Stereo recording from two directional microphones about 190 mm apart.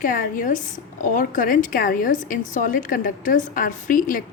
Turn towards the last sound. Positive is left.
turn(degrees=45)  # may be behind; listen again after turning